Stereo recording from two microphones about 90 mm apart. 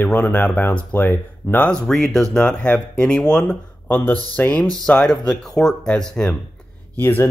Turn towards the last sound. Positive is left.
turn(degrees=25)  # may be behind; listen again after turning